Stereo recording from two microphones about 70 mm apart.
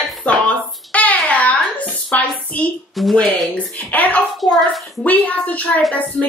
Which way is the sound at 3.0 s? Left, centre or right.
Centre.